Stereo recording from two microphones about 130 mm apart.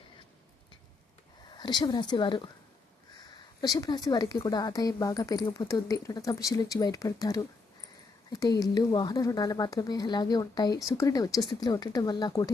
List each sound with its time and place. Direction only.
1.5 s speech: 35° left (ahead or behind)
3.6 s speech: 30° left (ahead or behind)